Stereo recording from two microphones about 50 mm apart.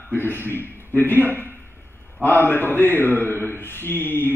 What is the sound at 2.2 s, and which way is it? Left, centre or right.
A man's voice, left.